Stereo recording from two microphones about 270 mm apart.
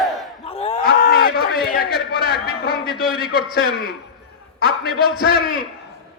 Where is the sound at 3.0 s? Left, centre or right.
Left.